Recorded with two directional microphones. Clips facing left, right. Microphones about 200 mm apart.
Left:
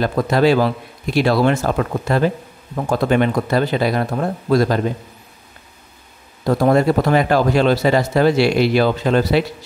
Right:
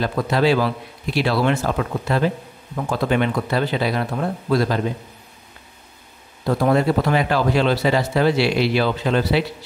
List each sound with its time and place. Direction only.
0.0 s speech: 45° left (ahead or behind)
6.4 s speech: 45° left (ahead or behind)